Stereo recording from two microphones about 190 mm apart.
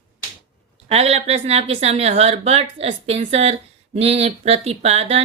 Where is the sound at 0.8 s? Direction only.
35° right (ahead or behind).